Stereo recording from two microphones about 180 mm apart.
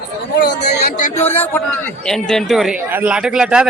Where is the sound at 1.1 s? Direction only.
10° left (ahead or behind).